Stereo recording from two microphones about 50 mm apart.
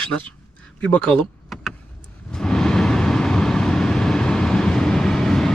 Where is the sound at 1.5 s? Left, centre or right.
Centre.